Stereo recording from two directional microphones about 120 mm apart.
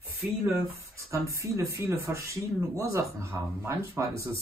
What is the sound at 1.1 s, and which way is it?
Speech, 25° right (ahead or behind).